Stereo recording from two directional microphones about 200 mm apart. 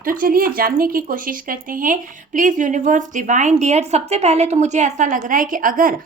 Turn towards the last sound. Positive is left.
turn(degrees=-45)  # may be behind; listen again after turning